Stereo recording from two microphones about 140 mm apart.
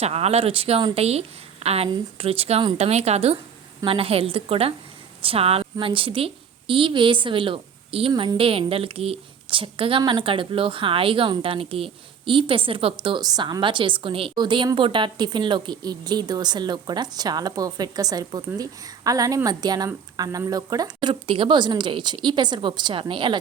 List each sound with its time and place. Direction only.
0.0 s a woman's voice: 50° right (ahead or behind)